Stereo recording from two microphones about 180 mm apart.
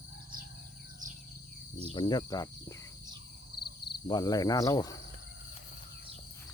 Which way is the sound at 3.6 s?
60° left (ahead or behind).